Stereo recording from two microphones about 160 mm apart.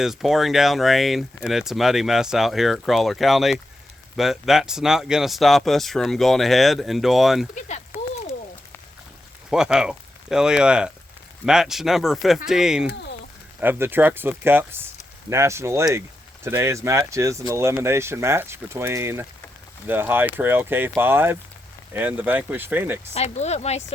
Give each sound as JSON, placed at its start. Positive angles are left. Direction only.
{"t": 0.0, "sound": "speech", "side_deg": 0}
{"t": 7.5, "sound": "a sound", "side_deg": 45}
{"t": 9.5, "sound": "speech", "side_deg": -5}
{"t": 23.1, "sound": "speech", "side_deg": 45}